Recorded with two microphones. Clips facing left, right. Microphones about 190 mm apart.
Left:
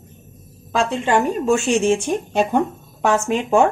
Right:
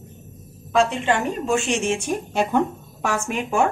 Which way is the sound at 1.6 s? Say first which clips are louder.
Left 5 dB; 30° left (ahead or behind).